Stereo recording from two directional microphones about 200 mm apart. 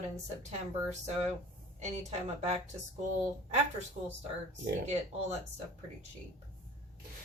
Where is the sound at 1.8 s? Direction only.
35° right (ahead or behind).